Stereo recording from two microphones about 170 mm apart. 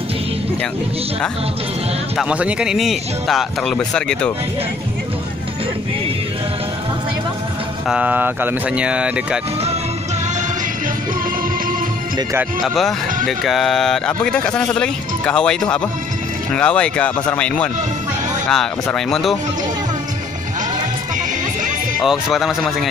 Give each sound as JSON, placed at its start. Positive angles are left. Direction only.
{"t": 2.1, "sound": "speech", "side_deg": -5}
{"t": 7.9, "sound": "speech", "side_deg": -10}
{"t": 12.2, "sound": "speech", "side_deg": -20}
{"t": 12.6, "sound": "speech", "side_deg": 0}
{"t": 22.0, "sound": "speech", "side_deg": 0}